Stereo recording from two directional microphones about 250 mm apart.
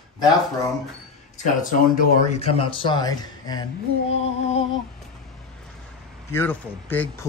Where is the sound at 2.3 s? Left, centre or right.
Left.